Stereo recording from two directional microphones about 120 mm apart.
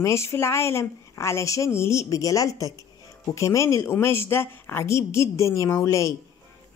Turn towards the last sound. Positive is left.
turn(degrees=25)  # may be behind; listen again after turning